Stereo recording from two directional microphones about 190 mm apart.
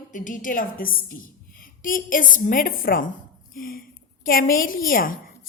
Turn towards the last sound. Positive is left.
turn(degrees=45)  # may be behind; listen again after turning